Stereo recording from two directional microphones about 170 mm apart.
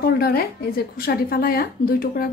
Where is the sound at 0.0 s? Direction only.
65° left (ahead or behind).